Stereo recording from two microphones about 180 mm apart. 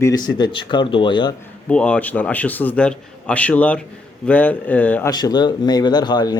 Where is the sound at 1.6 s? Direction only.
5° left (ahead or behind).